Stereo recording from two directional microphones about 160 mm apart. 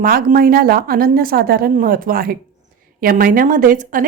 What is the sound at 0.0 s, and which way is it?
A woman's voice, 65° right (ahead or behind).